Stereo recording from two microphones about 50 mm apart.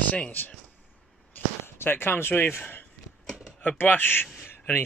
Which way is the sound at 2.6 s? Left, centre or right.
Left.